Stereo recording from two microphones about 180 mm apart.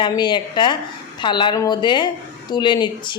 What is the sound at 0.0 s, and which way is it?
Speech, 25° left (ahead or behind).